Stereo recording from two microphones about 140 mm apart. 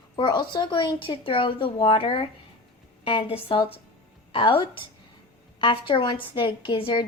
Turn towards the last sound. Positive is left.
turn(degrees=35)  # may be behind; listen again after turning